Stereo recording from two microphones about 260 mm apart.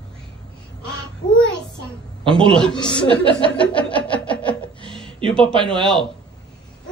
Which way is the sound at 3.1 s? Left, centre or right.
Centre.